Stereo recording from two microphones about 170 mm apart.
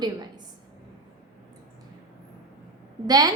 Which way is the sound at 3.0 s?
25° right (ahead or behind).